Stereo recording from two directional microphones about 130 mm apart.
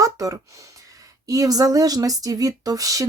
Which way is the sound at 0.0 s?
25° right (ahead or behind).